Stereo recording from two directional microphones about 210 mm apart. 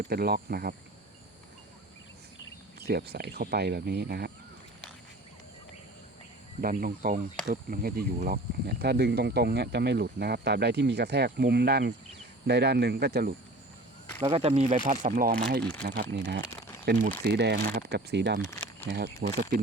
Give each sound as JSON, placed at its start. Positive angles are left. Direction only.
{"t": 0.0, "sound": "speech", "side_deg": -45}
{"t": 2.8, "sound": "speech", "side_deg": -50}
{"t": 6.6, "sound": "speech", "side_deg": -45}
{"t": 14.3, "sound": "speech", "side_deg": -25}
{"t": 15.0, "sound": "speech", "side_deg": -40}
{"t": 15.9, "sound": "speech", "side_deg": -55}
{"t": 17.0, "sound": "speech", "side_deg": -40}
{"t": 17.3, "sound": "speech", "side_deg": -50}
{"t": 18.5, "sound": "a sound", "side_deg": 10}
{"t": 18.9, "sound": "speech", "side_deg": -55}